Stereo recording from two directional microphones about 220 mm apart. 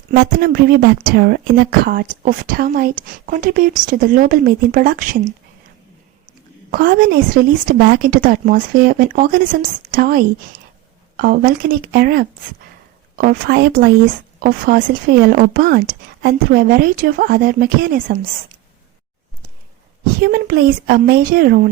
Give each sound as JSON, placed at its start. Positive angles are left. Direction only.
{"t": 0.1, "sound": "a woman's voice", "side_deg": -45}
{"t": 6.7, "sound": "a woman's voice", "side_deg": -40}
{"t": 20.2, "sound": "a woman's voice", "side_deg": -40}